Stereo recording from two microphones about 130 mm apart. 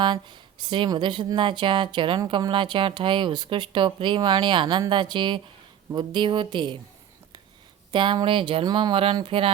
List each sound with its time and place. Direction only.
0.0 s speech: 35° right (ahead or behind)
7.9 s speech: 40° right (ahead or behind)